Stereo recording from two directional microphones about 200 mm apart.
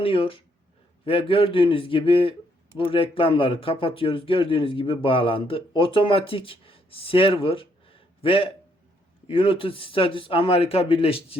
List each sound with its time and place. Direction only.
0.0 s speech: 25° left (ahead or behind)